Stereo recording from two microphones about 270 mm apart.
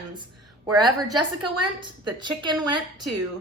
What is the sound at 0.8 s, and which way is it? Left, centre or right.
Speech, right.